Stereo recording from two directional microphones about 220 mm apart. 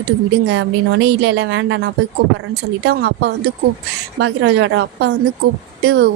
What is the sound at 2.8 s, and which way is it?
Speech, 50° right (ahead or behind).